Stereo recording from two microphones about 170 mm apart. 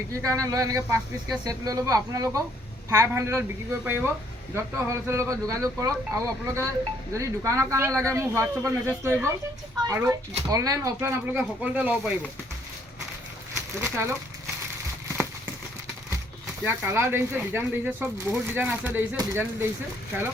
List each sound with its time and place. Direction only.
0.1 s speech: 20° right (ahead or behind)
13.8 s speech: 15° right (ahead or behind)
16.6 s speech: 15° right (ahead or behind)